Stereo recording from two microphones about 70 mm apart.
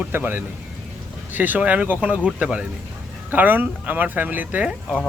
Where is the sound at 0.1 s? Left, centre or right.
Right.